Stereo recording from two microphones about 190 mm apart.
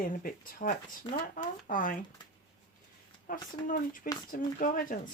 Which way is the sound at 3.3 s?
45° left (ahead or behind).